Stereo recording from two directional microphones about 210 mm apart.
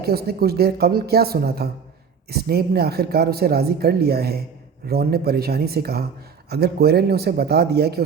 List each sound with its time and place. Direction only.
0.0 s speech: 45° right (ahead or behind)